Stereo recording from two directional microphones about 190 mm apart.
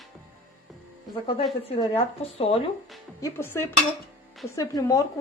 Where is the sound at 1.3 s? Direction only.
30° left (ahead or behind).